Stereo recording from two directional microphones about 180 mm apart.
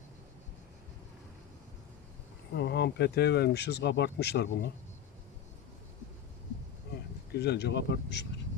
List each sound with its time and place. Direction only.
2.6 s speech: 65° left (ahead or behind)
7.3 s speech: 65° left (ahead or behind)